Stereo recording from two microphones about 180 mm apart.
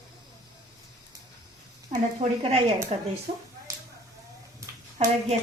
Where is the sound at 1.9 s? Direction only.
40° right (ahead or behind).